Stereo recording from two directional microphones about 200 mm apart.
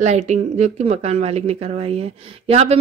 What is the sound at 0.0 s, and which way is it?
Speech, 35° right (ahead or behind).